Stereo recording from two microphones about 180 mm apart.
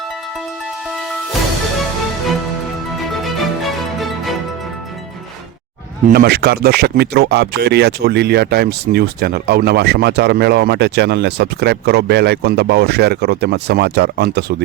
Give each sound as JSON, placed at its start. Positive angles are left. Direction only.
{"t": 3.1, "sound": "music", "side_deg": 0}
{"t": 6.1, "sound": "speech", "side_deg": -60}